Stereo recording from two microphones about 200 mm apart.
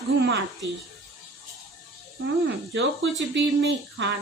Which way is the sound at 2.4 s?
60° right (ahead or behind).